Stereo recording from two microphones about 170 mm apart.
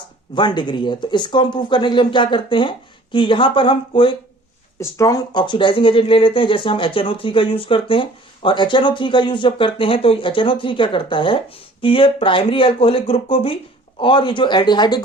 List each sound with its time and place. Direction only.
0.3 s speech: 25° left (ahead or behind)